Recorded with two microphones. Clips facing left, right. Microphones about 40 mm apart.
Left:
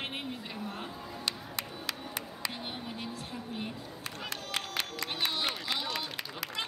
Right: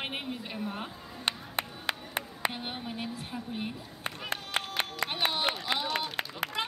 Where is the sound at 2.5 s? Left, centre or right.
Centre.